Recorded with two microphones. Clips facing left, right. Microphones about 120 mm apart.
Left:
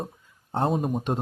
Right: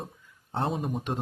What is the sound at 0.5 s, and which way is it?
Speech, 45° left (ahead or behind).